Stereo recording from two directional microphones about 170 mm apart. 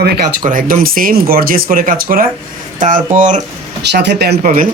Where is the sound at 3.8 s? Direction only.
80° right.